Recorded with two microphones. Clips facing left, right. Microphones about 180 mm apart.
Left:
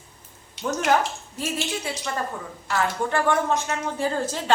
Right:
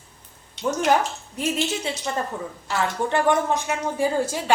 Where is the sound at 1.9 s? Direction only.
25° right (ahead or behind).